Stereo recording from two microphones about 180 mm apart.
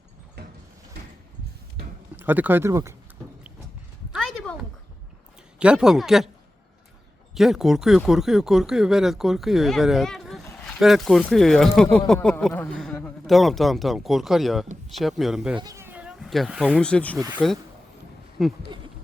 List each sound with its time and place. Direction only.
0.4 s a sound: 65° right (ahead or behind)
2.1 s speech: 10° right (ahead or behind)
4.1 s a sound: centre (ahead or behind)
5.5 s speech: 5° right (ahead or behind)
7.3 s speech: centre (ahead or behind)
15.5 s speech: 20° right (ahead or behind); by 18.5 s centre (ahead or behind)